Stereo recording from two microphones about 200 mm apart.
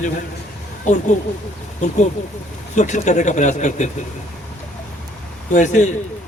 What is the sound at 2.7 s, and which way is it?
A man's voice, 35° left (ahead or behind).